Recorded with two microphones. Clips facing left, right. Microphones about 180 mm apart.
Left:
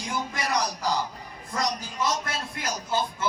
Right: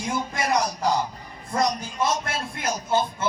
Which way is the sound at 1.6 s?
25° right (ahead or behind).